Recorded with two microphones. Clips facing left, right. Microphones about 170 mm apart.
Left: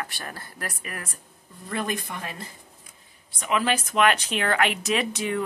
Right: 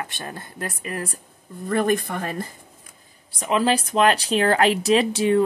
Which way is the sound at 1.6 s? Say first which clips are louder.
Right 9 dB; 50° right (ahead or behind).